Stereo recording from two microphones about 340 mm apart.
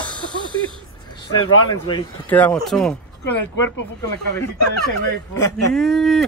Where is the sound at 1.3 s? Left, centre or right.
Left.